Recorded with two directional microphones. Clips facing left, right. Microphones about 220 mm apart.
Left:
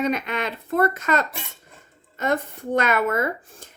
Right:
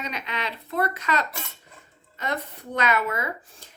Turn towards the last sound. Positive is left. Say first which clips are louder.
# left 6 dB
turn(degrees=50)  # may be behind; listen again after turning